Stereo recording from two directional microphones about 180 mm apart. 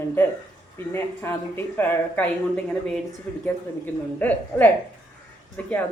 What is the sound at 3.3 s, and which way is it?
Speech, 5° left (ahead or behind).